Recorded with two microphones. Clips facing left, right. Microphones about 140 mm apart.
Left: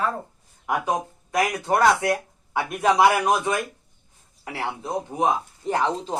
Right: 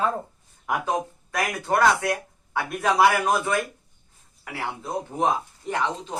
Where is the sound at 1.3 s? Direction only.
25° left (ahead or behind).